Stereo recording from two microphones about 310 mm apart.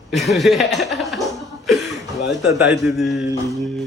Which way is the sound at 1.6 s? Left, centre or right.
Centre.